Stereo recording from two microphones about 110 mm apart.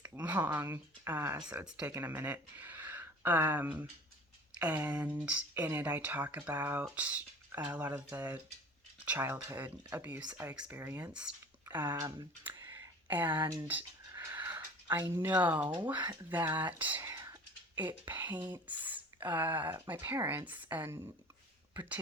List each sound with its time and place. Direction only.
0.2 s speech: 15° right (ahead or behind)
1.5 s speech: 10° right (ahead or behind)
11.1 s speech: 10° right (ahead or behind)
11.6 s a sound: 15° right (ahead or behind)
12.5 s a sound: 30° right (ahead or behind)
13.1 s speech: 15° right (ahead or behind)
14.1 s wheeze: 30° right (ahead or behind)
14.3 s wheeze: 15° right (ahead or behind)
15.1 s speech: 20° right (ahead or behind)
17.0 s whispering: 30° right (ahead or behind)
17.7 s speech: 15° right (ahead or behind)